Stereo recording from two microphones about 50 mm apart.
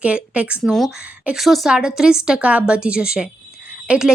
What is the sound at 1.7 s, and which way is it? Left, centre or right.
A woman's voice, centre.